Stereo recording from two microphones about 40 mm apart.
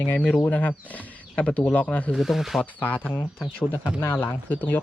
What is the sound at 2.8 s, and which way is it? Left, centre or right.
Speech, left.